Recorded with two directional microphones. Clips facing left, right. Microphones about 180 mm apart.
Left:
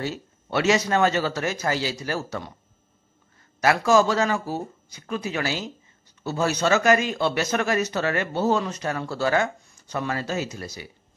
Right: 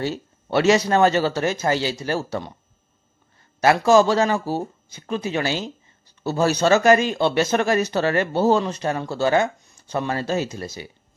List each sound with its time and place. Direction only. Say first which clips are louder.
0.0 s speech: right 4 dB; 35° right (ahead or behind)
3.6 s speech: right 4 dB; 30° right (ahead or behind)